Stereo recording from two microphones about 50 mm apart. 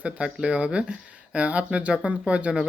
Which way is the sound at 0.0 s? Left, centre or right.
Right.